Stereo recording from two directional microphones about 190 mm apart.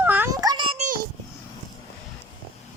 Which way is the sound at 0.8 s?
45° right (ahead or behind).